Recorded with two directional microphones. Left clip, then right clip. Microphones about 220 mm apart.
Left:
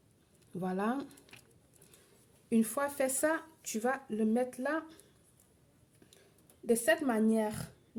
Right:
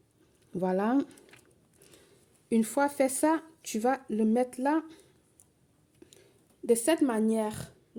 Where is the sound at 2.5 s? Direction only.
35° right (ahead or behind).